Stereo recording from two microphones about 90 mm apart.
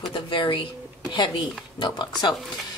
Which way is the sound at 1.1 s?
55° left (ahead or behind).